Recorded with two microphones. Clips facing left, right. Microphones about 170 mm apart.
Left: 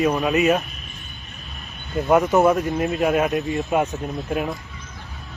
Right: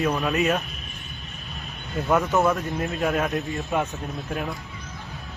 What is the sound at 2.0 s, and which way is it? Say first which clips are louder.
Speech: left 5 dB; 15° left (ahead or behind).